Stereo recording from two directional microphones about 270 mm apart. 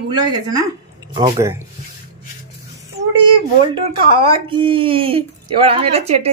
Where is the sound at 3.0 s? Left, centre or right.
Right.